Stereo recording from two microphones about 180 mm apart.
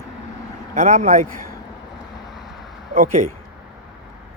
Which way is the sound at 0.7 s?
40° right (ahead or behind).